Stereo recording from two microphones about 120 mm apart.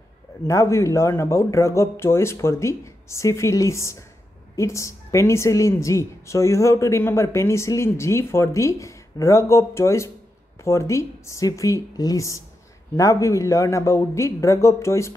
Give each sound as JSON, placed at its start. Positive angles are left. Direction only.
{"t": 0.5, "sound": "a woman's voice", "side_deg": 25}